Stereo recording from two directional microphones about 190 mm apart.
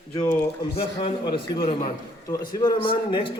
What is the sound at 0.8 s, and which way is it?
A man's voice, 25° left (ahead or behind).